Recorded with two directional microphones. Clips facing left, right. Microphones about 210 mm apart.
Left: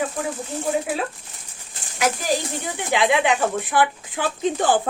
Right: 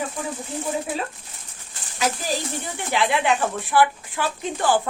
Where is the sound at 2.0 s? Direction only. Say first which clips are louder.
Left 3 dB; 15° left (ahead or behind).